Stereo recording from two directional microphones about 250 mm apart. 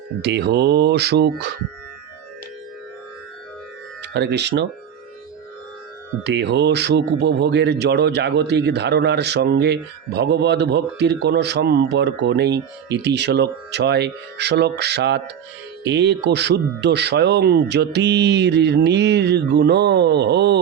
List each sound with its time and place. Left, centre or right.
0.2 s speech: right
4.0 s speech: right
6.2 s speech: right